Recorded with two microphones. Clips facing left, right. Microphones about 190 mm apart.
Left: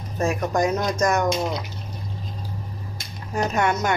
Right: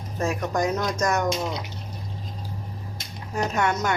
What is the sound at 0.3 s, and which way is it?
Speech, 10° left (ahead or behind).